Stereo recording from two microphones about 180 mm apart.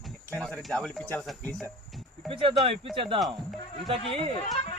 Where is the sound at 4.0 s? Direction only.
35° left (ahead or behind).